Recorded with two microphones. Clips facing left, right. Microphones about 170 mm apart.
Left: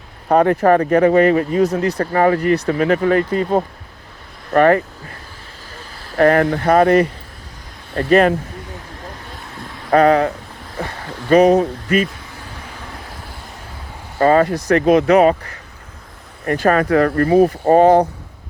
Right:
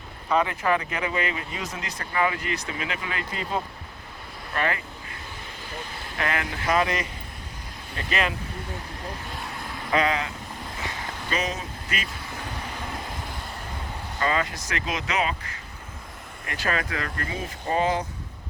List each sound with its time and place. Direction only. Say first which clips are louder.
0.3 s speech: left 11 dB; 55° left (ahead or behind)
1.7 s speech: left 17 dB; 60° left (ahead or behind)
2.1 s speech: left 11 dB; 45° left (ahead or behind)
6.1 s speech: left 16 dB; 45° left (ahead or behind)
9.9 s speech: left 12 dB; 55° left (ahead or behind)
14.2 s speech: left 13 dB; 45° left (ahead or behind)
16.5 s speech: left 14 dB; 50° left (ahead or behind)